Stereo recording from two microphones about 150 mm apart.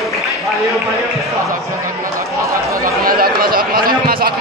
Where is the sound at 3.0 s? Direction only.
80° right.